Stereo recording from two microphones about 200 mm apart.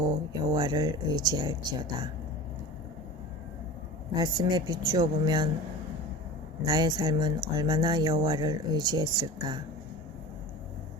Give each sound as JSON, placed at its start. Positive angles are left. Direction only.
{"t": 0.5, "sound": "speech", "side_deg": -20}
{"t": 4.1, "sound": "speech", "side_deg": -20}
{"t": 6.7, "sound": "speech", "side_deg": -20}